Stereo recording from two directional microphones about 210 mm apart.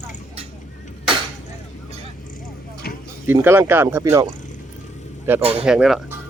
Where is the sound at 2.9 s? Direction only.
45° left (ahead or behind).